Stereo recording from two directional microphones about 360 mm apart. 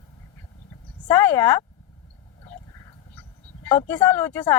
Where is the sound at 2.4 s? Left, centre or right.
Centre.